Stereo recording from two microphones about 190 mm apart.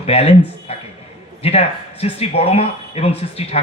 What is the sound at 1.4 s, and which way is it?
A man's voice, 30° left (ahead or behind).